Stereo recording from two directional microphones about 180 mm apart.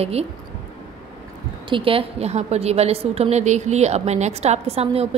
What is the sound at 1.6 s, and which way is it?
A woman's voice, 30° right (ahead or behind).